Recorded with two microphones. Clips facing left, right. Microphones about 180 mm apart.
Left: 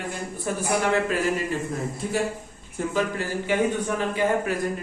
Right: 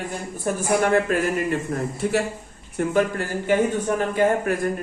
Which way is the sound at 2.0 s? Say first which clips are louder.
Right 3 dB; 65° right (ahead or behind).